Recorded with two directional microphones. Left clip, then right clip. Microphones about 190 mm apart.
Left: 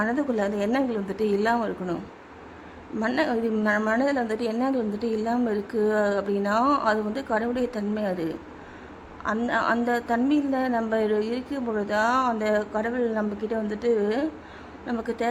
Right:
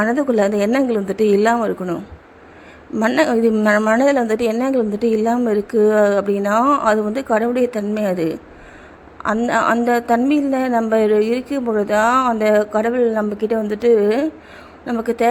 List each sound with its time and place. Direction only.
0.0 s a woman's voice: 25° right (ahead or behind)